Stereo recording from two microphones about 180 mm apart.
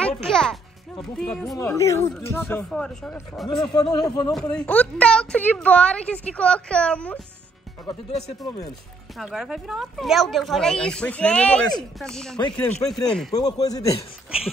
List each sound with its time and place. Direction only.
0.0 s music: 5° left (ahead or behind)
1.1 s speech: 5° left (ahead or behind)
1.6 s a woman's voice: 15° left (ahead or behind)
2.1 s speech: 5° left (ahead or behind)
3.7 s a man's voice: 20° left (ahead or behind)
4.3 s a woman's voice: 5° left (ahead or behind)
13.3 s a man's voice: 20° left (ahead or behind)